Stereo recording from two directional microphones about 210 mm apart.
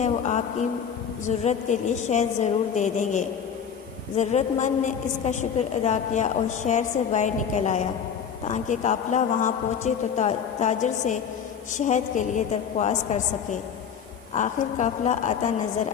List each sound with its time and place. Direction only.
0.0 s a woman's voice: 35° left (ahead or behind)
14.3 s a woman's voice: 35° left (ahead or behind)